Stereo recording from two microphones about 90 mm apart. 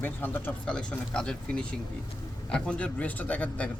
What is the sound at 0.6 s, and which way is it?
A man's voice, 10° left (ahead or behind).